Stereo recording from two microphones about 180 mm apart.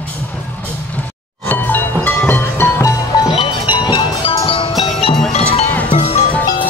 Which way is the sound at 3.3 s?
25° left (ahead or behind).